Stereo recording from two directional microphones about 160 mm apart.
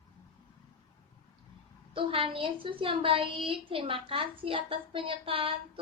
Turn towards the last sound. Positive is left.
turn(degrees=-35)  # may be behind; listen again after turning